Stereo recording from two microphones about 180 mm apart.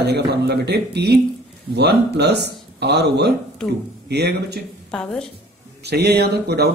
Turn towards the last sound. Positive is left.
turn(degrees=-65)  # may be behind; listen again after turning